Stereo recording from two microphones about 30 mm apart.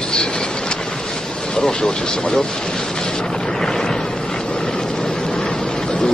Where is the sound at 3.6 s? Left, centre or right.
Centre.